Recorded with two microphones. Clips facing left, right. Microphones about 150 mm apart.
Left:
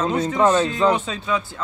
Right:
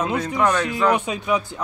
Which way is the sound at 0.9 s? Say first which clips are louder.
Right 2 dB; 15° right (ahead or behind).